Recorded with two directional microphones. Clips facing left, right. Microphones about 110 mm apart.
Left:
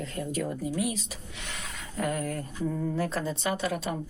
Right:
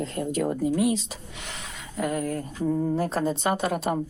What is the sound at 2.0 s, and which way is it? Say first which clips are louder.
Speech: right 3 dB; 25° right (ahead or behind).